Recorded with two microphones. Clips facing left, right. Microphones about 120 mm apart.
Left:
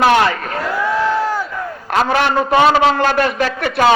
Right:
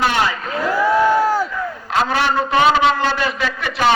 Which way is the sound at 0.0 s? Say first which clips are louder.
Left 6 dB; 60° left (ahead or behind).